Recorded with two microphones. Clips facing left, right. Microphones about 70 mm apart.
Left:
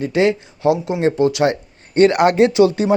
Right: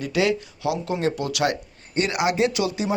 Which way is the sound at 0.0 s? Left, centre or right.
Left.